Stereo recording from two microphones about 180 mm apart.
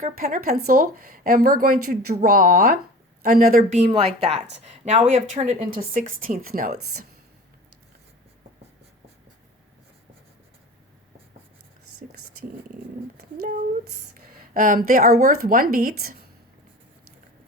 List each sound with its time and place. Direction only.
0.0 s a woman's voice: 50° right (ahead or behind)
3.6 s a woman's voice: 35° right (ahead or behind); by 7.1 s 55° right (ahead or behind)
12.0 s a sound: 50° right (ahead or behind)
14.1 s speech: 50° right (ahead or behind)